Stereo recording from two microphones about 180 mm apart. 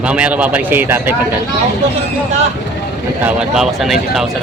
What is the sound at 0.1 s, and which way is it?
A man's voice, 5° right (ahead or behind).